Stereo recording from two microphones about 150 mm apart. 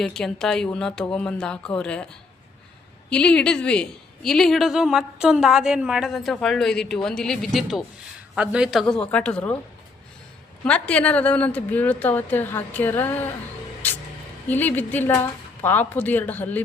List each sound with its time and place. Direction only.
0.0 s a woman's voice: 5° left (ahead or behind)
3.1 s a woman's voice: 5° left (ahead or behind)
10.6 s a woman's voice: 10° left (ahead or behind)
13.8 s music: 10° left (ahead or behind)
14.5 s a woman's voice: 10° left (ahead or behind)